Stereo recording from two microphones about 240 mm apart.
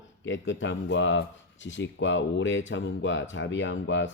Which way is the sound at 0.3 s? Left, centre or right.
Left.